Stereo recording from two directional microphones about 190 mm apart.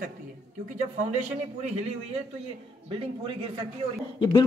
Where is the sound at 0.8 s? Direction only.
40° right (ahead or behind).